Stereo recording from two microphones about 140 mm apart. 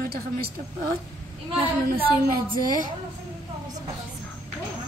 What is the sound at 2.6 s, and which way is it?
Speech, 75° right (ahead or behind).